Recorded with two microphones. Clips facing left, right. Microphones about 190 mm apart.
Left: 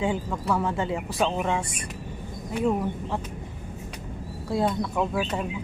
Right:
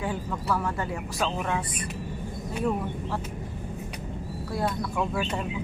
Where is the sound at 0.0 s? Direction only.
20° left (ahead or behind).